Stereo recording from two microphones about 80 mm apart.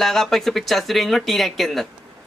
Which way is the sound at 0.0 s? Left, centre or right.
Centre.